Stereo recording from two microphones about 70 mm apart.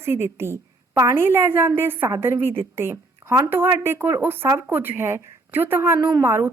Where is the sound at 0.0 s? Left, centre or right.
Right.